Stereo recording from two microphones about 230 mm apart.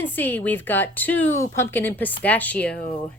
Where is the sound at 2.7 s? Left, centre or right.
Left.